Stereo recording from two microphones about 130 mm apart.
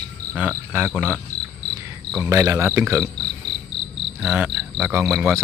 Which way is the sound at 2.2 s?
25° right (ahead or behind).